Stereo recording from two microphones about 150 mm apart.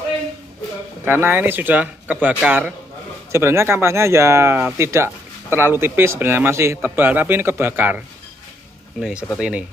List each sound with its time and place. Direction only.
1.0 s speech: 15° right (ahead or behind)
9.4 s speech: 10° right (ahead or behind)